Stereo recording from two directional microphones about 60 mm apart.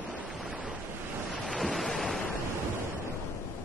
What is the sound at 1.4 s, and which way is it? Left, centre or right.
Waves, centre.